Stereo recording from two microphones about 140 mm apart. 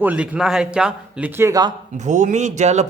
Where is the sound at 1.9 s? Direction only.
60° right (ahead or behind).